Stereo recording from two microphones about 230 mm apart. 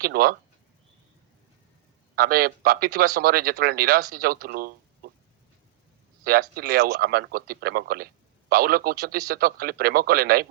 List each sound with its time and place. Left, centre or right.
0.0 s speech: right
2.1 s speech: right
6.2 s speech: right